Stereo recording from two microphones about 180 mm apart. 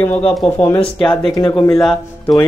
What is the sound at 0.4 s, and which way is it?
Speech, 5° left (ahead or behind).